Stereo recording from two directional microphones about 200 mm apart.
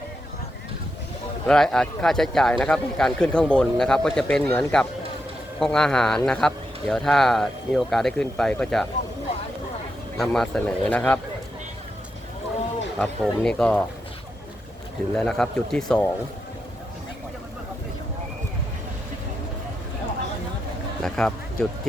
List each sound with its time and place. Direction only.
1.5 s speech: centre (ahead or behind)
10.2 s speech: centre (ahead or behind)
13.0 s speech: 5° left (ahead or behind)
15.1 s speech: centre (ahead or behind)
21.0 s speech: centre (ahead or behind)